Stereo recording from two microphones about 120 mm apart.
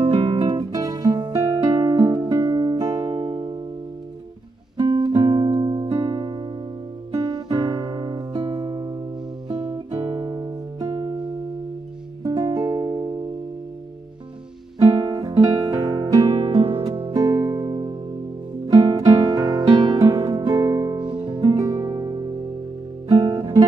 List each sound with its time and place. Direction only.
0.0 s music: 45° right (ahead or behind)
4.7 s music: 35° right (ahead or behind)
5.9 s music: 50° right (ahead or behind)
9.8 s music: 25° right (ahead or behind)
10.1 s music: 35° right (ahead or behind)
10.9 s music: 55° right (ahead or behind)
12.2 s music: 30° right (ahead or behind)
15.1 s music: 30° right (ahead or behind)
16.0 s music: 40° right (ahead or behind)
17.1 s music: 35° right (ahead or behind)
18.9 s music: 30° right (ahead or behind)
21.1 s music: 45° right (ahead or behind)
23.0 s guitar: 45° right (ahead or behind)